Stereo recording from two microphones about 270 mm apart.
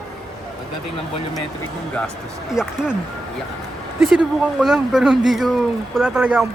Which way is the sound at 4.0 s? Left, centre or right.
Centre.